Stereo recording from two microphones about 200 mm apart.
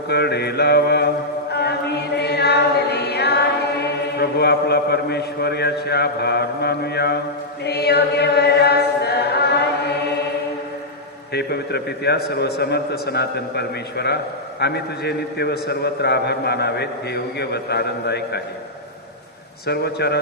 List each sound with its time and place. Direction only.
0.1 s mantra: 55° left (ahead or behind)
2.1 s chant: 55° left (ahead or behind)
7.6 s choir: 55° left (ahead or behind)
11.3 s a man's voice: 55° left (ahead or behind)
19.6 s a man's voice: 55° left (ahead or behind)